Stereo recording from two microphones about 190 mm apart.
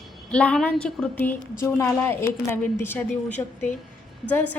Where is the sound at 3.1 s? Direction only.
40° left (ahead or behind).